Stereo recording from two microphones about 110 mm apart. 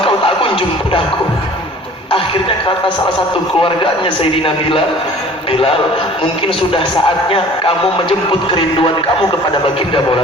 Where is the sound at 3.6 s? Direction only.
50° left (ahead or behind).